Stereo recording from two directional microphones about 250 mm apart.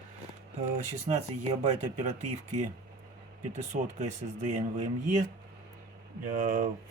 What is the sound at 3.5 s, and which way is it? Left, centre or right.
Speech, right.